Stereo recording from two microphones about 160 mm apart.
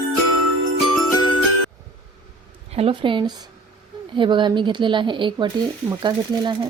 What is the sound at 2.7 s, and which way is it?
A woman's voice, 35° right (ahead or behind).